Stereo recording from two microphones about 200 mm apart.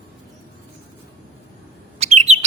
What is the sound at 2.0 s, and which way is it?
Bird, 35° right (ahead or behind).